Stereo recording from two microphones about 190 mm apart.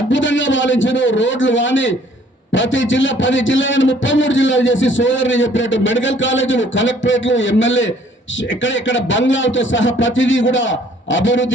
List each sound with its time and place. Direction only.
0.1 s a man's voice: 75° left (ahead or behind)